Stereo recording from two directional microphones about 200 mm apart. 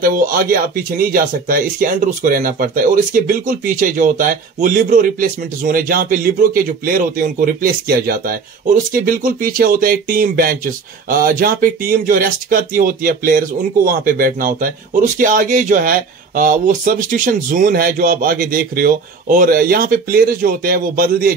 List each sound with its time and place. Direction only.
0.0 s speech: 45° right (ahead or behind)